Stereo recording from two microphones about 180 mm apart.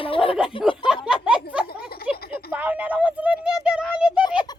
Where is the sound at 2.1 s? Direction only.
60° left (ahead or behind).